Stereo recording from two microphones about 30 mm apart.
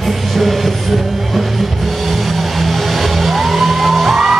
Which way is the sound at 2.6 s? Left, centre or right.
Centre.